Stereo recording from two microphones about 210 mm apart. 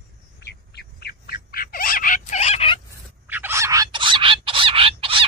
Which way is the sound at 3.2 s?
10° right (ahead or behind).